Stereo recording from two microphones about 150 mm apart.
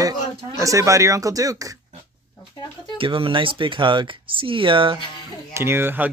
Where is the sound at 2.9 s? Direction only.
35° right (ahead or behind).